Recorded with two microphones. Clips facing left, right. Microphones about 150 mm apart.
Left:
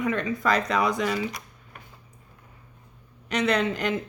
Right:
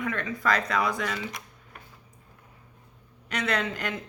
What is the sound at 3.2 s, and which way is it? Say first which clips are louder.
Speech: left 5 dB; 20° left (ahead or behind).